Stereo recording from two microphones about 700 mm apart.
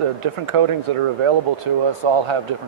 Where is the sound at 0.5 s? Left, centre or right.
Right.